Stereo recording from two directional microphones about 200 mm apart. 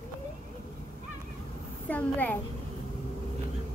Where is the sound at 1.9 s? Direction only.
10° left (ahead or behind).